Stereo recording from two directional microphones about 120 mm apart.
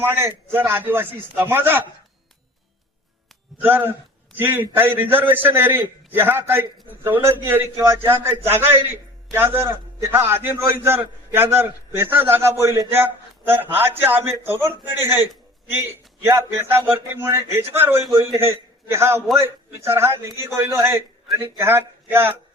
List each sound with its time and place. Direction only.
0.0 s speech: 20° right (ahead or behind)
3.6 s a man's voice: 20° right (ahead or behind)